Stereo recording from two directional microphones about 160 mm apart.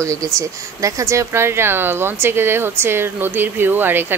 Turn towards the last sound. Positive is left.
turn(degrees=-10)  # may be behind; listen again after turning